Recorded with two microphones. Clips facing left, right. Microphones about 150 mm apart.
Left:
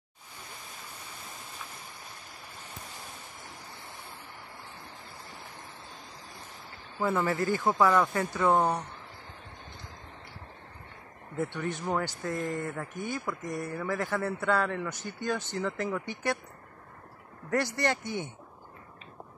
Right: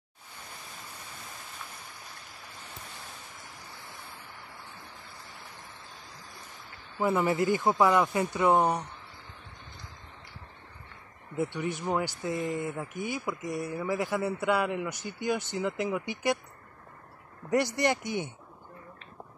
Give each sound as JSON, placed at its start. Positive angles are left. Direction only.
{"t": 7.0, "sound": "speech", "side_deg": -20}
{"t": 11.3, "sound": "speech", "side_deg": -10}
{"t": 17.5, "sound": "speech", "side_deg": -15}